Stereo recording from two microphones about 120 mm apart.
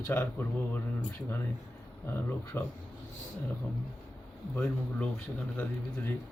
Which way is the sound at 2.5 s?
20° left (ahead or behind).